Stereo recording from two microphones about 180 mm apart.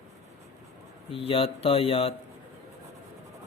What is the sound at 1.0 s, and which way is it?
Speech, 30° left (ahead or behind).